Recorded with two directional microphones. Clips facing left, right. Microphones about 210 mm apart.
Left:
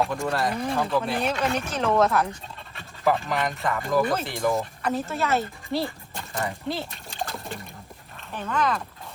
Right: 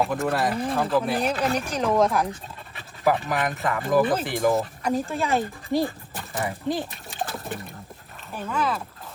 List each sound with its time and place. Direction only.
0.0 s speech: 5° right (ahead or behind)
1.3 s speech: 35° right (ahead or behind)
1.6 s speech: 10° right (ahead or behind)
6.1 s a sound: 5° right (ahead or behind)
6.9 s splash: centre (ahead or behind)
8.3 s speech: 5° right (ahead or behind)